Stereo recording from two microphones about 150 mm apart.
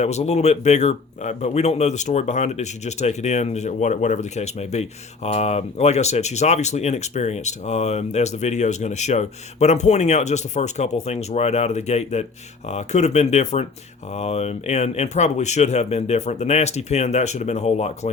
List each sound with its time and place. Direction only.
0.0 s speech: 45° left (ahead or behind)